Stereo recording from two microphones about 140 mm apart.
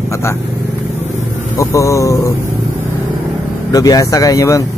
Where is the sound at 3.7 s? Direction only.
25° left (ahead or behind).